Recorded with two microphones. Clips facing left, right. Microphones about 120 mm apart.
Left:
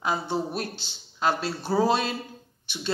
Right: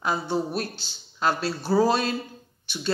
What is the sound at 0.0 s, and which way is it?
Speech, 20° left (ahead or behind).